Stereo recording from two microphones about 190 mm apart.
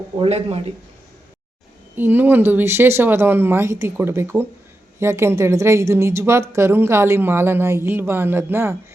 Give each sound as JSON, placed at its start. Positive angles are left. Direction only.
{"t": 0.2, "sound": "speech", "side_deg": -35}
{"t": 2.0, "sound": "a woman's voice", "side_deg": -10}